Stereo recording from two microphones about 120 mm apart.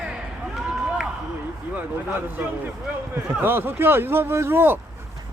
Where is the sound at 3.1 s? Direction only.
20° right (ahead or behind).